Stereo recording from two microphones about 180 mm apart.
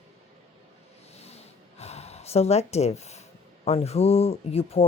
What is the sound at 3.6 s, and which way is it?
Speech, 35° left (ahead or behind).